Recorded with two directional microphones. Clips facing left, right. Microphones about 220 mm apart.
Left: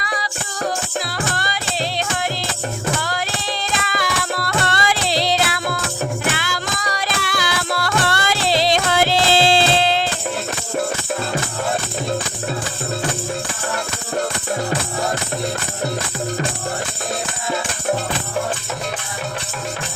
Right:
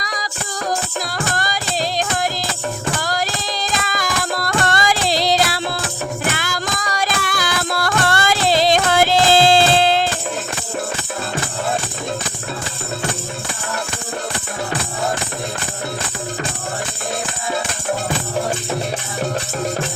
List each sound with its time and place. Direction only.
0.0 s music: 40° right (ahead or behind)
6.3 s music: 45° right (ahead or behind)